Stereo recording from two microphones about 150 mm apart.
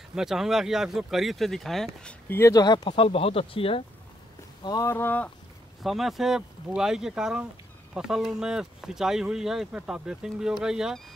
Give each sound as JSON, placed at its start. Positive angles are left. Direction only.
{"t": 0.1, "sound": "speech", "side_deg": -5}
{"t": 4.6, "sound": "speech", "side_deg": 20}
{"t": 5.8, "sound": "speech", "side_deg": 0}